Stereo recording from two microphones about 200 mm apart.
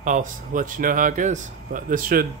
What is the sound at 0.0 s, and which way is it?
Speech, 40° right (ahead or behind).